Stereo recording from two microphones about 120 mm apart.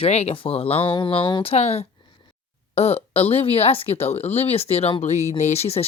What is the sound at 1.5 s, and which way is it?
Speech, 60° left (ahead or behind).